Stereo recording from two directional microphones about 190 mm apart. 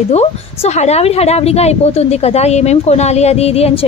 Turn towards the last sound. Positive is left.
turn(degrees=30)  # may be behind; listen again after turning